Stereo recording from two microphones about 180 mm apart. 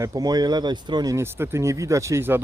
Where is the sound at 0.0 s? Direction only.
20° right (ahead or behind).